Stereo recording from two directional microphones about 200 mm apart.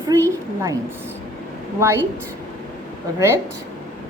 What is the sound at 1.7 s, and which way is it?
Speech, 15° right (ahead or behind).